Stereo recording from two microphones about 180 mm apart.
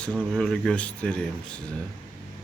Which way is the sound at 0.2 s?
5° left (ahead or behind).